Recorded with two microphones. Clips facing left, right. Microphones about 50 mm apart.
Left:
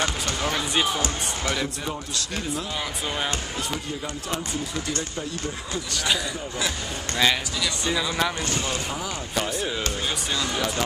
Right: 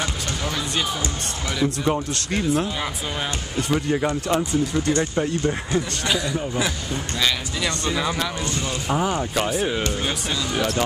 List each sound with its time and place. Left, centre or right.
0.4 s basketball bounce: centre
1.9 s a man's voice: right
4.8 s speech: right
8.9 s speech: right
10.0 s speech: right